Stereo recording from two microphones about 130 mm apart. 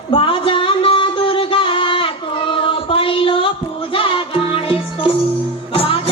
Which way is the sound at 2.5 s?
45° left (ahead or behind).